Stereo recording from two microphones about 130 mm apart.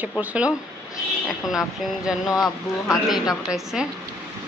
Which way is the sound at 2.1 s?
5° right (ahead or behind).